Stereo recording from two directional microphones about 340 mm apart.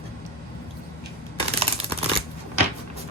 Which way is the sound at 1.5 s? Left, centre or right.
Centre.